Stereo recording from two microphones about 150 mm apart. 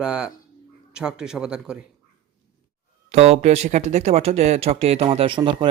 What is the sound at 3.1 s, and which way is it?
Speech, 45° right (ahead or behind).